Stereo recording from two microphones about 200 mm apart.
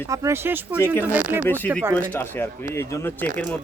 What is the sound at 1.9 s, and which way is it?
Speech, 10° left (ahead or behind).